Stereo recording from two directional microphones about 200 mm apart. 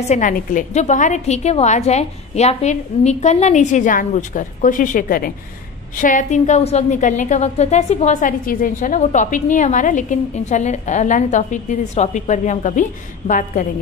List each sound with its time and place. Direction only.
0.1 s a woman's voice: 40° left (ahead or behind)